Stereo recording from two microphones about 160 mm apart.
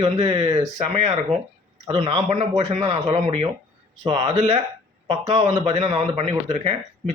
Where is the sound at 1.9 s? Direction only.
35° right (ahead or behind).